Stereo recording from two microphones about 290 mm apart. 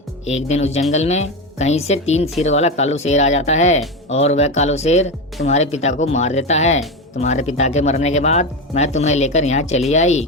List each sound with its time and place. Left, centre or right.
0.3 s speech: left